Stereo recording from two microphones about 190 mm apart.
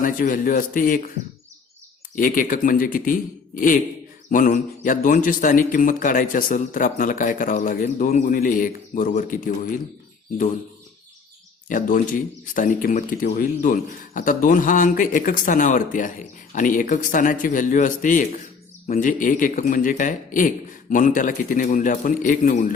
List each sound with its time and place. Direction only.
0.0 s speech: 45° left (ahead or behind)
2.1 s speech: 45° left (ahead or behind)
11.7 s speech: 40° left (ahead or behind)